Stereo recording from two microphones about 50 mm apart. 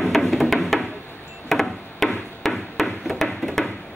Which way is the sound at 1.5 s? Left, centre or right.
Centre.